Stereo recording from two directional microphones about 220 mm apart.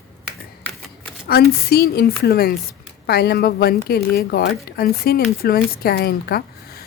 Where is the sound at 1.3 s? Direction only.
45° left (ahead or behind).